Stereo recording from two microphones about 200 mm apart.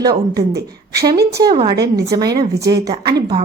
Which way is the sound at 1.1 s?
55° right (ahead or behind).